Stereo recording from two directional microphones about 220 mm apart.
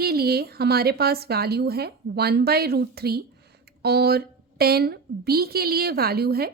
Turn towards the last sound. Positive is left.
turn(degrees=-45)  # may be behind; listen again after turning